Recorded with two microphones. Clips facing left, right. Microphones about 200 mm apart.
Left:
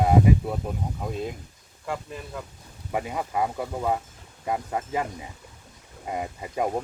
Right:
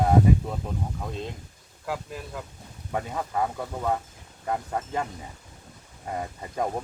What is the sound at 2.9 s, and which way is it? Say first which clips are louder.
Speech: left 1 dB; 10° left (ahead or behind).